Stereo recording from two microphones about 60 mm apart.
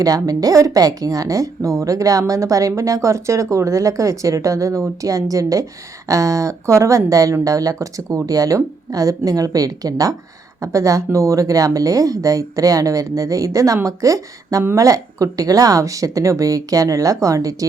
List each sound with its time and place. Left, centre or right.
0.0 s speech: right
7.4 s speech: right
10.6 s speech: right